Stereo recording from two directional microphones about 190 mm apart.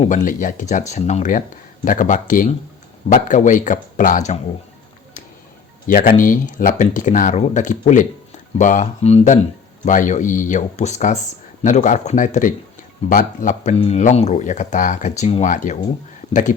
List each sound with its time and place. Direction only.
0.0 s speech: 40° left (ahead or behind)
5.9 s speech: 45° left (ahead or behind)